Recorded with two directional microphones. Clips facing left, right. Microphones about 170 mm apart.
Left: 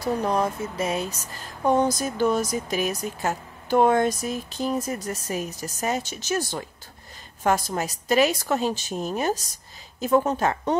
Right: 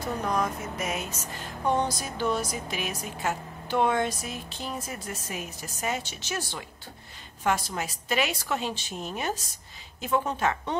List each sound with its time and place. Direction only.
0.0 s speech: 30° left (ahead or behind)
1.7 s speech: 45° left (ahead or behind)